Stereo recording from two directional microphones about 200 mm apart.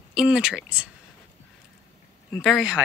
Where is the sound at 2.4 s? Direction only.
Centre (ahead or behind).